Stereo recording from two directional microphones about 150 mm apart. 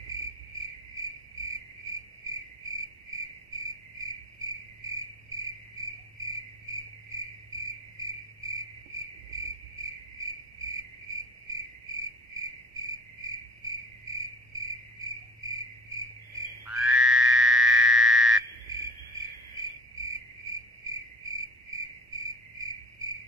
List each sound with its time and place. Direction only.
2.2 s cricket: 25° right (ahead or behind)
16.6 s frog: 5° right (ahead or behind)
20.0 s cricket: 25° right (ahead or behind)